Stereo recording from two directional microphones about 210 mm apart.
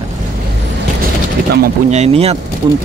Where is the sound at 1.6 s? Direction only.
30° right (ahead or behind).